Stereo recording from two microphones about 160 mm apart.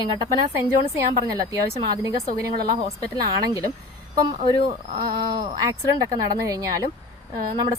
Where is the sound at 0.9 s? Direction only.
20° right (ahead or behind).